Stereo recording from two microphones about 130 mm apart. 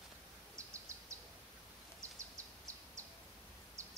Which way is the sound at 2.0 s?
25° right (ahead or behind).